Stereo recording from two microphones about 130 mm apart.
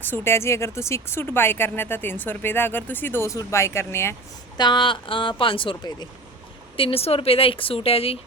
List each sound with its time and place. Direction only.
0.0 s speech: 15° left (ahead or behind)
4.5 s speech: 35° left (ahead or behind)